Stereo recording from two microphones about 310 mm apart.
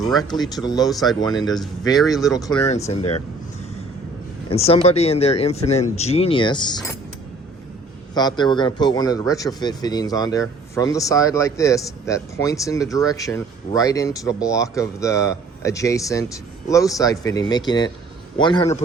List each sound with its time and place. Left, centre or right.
0.2 s a man's voice: centre
4.4 s speech: centre
8.1 s a man's voice: centre